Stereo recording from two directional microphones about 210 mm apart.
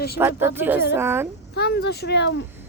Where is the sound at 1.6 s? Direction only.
50° left (ahead or behind).